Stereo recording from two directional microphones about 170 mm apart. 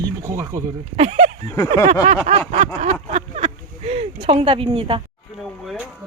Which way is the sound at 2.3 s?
35° right (ahead or behind).